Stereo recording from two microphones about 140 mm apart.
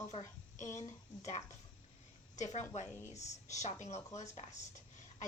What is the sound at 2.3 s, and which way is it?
A woman's voice, 60° left (ahead or behind).